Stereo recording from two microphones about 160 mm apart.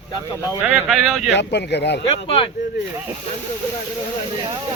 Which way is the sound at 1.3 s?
90° left.